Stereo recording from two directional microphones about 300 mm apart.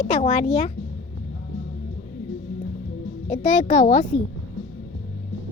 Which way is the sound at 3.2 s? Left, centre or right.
Left.